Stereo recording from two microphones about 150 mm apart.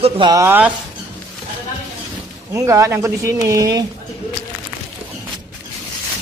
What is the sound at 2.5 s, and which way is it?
Speech, 20° right (ahead or behind).